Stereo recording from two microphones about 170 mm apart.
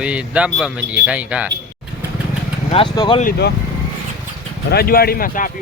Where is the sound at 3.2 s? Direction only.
65° left (ahead or behind).